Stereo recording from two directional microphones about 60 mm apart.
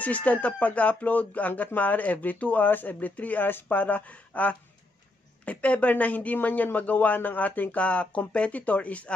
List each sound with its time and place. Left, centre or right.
0.0 s a woman's voice: left